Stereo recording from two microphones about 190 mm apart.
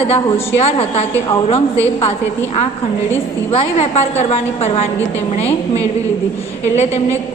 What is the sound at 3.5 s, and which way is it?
A woman's voice, 35° left (ahead or behind).